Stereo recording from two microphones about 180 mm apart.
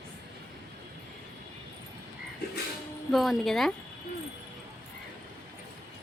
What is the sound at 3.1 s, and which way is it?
Speech, centre (ahead or behind).